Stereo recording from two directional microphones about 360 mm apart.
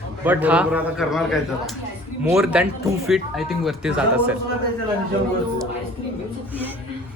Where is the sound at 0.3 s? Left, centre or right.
Centre.